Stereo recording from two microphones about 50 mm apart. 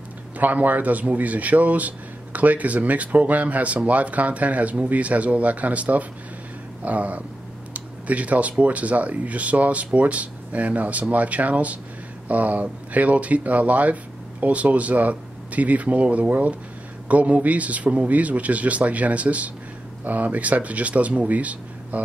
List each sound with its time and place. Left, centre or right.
0.4 s speech: right